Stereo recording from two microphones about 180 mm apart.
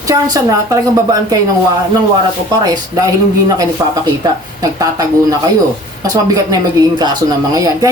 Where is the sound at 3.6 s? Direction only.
20° right (ahead or behind).